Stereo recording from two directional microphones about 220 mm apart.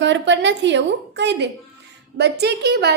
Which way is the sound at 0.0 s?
55° right (ahead or behind).